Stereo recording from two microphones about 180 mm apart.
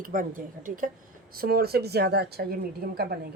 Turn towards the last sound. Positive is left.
turn(degrees=-60)  # may be behind; listen again after turning